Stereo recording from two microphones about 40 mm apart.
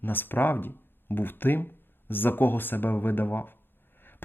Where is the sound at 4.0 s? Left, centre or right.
Left.